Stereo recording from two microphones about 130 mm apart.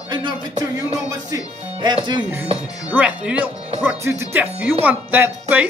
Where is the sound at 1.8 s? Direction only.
35° right (ahead or behind).